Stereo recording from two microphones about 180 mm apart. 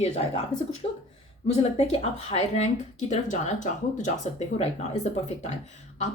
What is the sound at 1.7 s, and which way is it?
Speech, 35° left (ahead or behind).